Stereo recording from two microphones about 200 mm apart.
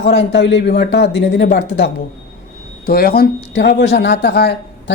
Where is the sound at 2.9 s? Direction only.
50° left (ahead or behind).